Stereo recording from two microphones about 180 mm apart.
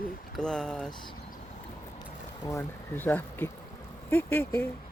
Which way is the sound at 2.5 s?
10° left (ahead or behind).